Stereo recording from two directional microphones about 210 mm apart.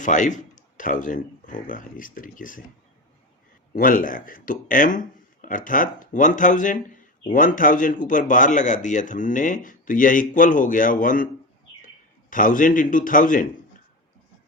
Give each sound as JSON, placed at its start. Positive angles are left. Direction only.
{"t": 0.0, "sound": "speech", "side_deg": 35}
{"t": 3.8, "sound": "speech", "side_deg": 40}
{"t": 12.3, "sound": "speech", "side_deg": 40}